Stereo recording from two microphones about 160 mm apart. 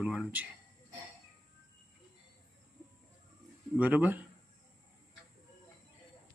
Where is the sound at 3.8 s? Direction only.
10° right (ahead or behind).